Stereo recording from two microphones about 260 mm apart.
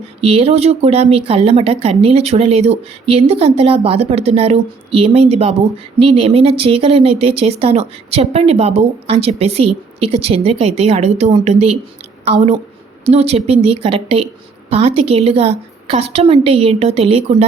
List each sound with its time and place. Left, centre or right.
0.2 s speech: right